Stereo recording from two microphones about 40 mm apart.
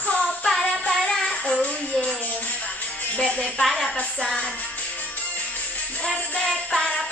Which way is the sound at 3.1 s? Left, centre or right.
Left.